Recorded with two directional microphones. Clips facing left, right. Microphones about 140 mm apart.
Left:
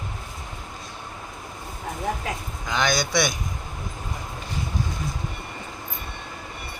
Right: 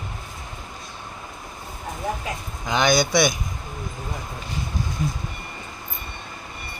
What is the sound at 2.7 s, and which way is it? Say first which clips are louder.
Speech: right 4 dB; 15° right (ahead or behind).